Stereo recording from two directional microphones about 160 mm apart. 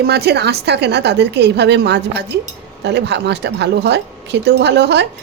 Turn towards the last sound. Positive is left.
turn(degrees=-90)